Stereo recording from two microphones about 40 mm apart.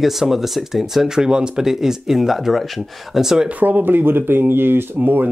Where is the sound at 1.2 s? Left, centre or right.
Right.